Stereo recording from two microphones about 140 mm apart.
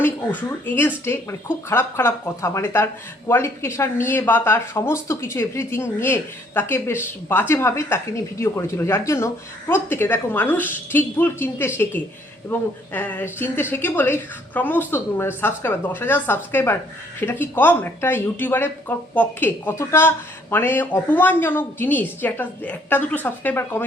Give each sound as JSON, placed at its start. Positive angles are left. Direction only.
{"t": 0.0, "sound": "speech", "side_deg": 15}